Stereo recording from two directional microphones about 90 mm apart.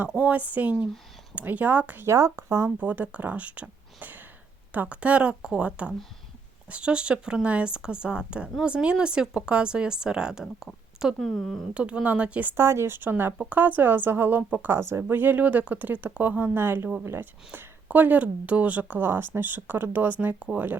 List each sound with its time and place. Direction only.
0.1 s speech: 15° right (ahead or behind)
2.0 s speech: 35° right (ahead or behind)
2.6 s speech: 20° right (ahead or behind); by 11.6 s centre (ahead or behind)
11.7 s speech: 15° right (ahead or behind)
12.5 s speech: 30° right (ahead or behind)